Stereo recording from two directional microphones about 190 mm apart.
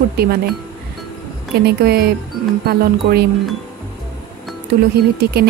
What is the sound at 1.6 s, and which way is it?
Speech, 55° right (ahead or behind).